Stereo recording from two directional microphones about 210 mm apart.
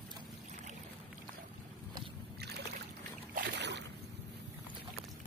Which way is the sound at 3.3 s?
55° right (ahead or behind).